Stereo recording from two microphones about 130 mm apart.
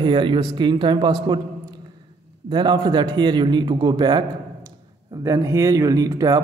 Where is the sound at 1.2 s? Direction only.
35° right (ahead or behind).